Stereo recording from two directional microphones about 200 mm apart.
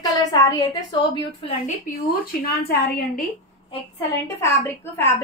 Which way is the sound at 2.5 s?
50° left (ahead or behind).